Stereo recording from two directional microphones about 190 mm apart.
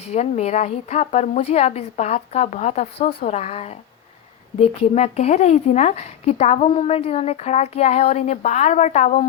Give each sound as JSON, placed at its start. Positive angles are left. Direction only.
{"t": 0.1, "sound": "a woman's voice", "side_deg": 35}